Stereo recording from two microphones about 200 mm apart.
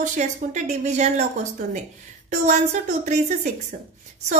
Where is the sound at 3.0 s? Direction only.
35° right (ahead or behind).